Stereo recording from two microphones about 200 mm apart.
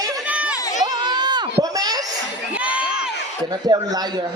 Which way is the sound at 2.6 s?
5° right (ahead or behind).